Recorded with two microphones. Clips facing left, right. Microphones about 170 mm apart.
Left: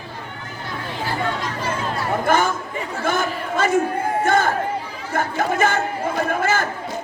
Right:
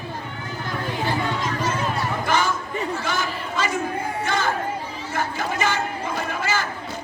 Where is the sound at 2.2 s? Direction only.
50° left (ahead or behind).